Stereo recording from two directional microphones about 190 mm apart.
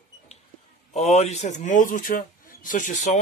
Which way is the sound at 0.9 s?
35° left (ahead or behind).